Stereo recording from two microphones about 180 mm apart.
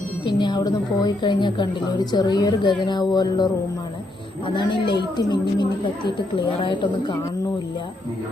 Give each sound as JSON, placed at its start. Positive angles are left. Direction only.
{"t": 0.3, "sound": "a woman's voice", "side_deg": 25}